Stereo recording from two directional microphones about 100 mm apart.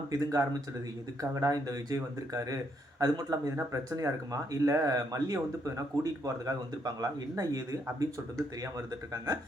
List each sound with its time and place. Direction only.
0.1 s speech: 35° right (ahead or behind)
9.1 s speech: 35° right (ahead or behind)